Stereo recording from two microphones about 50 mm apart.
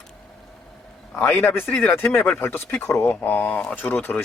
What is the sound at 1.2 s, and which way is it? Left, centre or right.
Speech, left.